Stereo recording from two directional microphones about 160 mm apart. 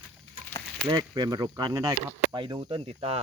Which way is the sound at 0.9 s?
25° right (ahead or behind).